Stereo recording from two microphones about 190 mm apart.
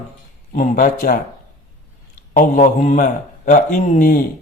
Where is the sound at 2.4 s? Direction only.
40° left (ahead or behind).